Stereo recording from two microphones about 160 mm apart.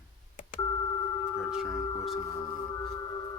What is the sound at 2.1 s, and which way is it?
Singing bowl, 25° left (ahead or behind).